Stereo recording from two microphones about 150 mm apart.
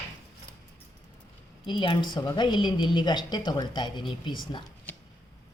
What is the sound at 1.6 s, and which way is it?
A woman's voice, 35° left (ahead or behind).